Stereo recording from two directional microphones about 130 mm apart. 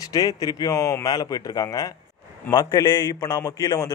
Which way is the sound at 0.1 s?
30° left (ahead or behind).